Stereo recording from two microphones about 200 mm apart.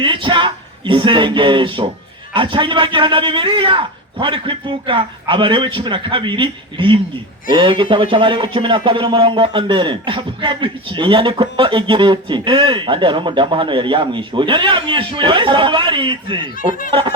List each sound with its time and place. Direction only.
0.0 s speech: 25° right (ahead or behind)